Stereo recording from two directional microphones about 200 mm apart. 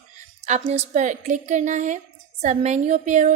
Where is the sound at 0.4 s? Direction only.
35° right (ahead or behind).